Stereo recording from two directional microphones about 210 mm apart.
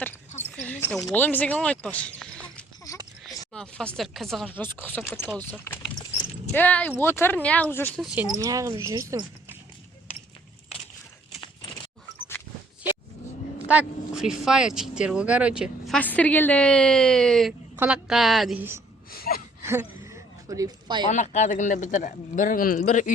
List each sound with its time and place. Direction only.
0.5 s a sound: 10° left (ahead or behind)
1.1 s speech: 10° left (ahead or behind)
2.9 s a sound: 15° left (ahead or behind)
3.5 s speech: 5° left (ahead or behind)
8.0 s speech: 5° right (ahead or behind)
13.7 s speech: 5° right (ahead or behind)
16.0 s speech: 5° left (ahead or behind); by 18.8 s 10° right (ahead or behind)
19.1 s gasp: 45° left (ahead or behind)
19.6 s a sound: 10° right (ahead or behind)
21.1 s speech: 35° left (ahead or behind)